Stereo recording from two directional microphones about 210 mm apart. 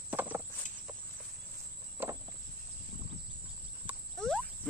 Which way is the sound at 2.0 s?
10° right (ahead or behind).